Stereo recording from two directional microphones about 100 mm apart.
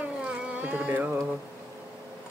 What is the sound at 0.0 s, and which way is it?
Carnatic music, 15° right (ahead or behind).